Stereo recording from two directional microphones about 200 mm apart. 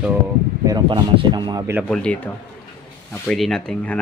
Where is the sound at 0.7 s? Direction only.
20° right (ahead or behind).